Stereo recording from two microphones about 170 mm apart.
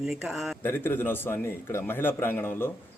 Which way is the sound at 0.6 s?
15° left (ahead or behind).